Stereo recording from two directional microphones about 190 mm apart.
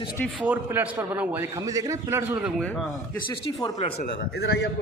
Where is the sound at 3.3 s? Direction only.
20° left (ahead or behind).